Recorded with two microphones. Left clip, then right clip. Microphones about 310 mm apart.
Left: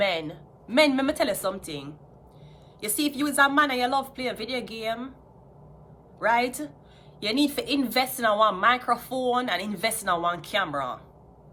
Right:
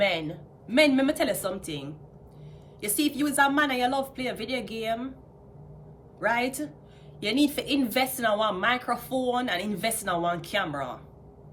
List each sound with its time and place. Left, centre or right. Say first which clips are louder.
0.0 s a woman's voice: even; centre
6.1 s a woman's voice: left 3 dB; centre